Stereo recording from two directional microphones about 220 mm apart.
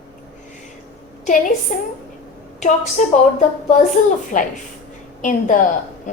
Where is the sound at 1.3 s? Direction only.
35° left (ahead or behind).